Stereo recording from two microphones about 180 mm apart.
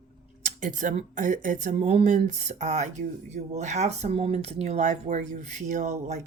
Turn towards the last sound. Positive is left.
turn(degrees=-40)  # may be behind; listen again after turning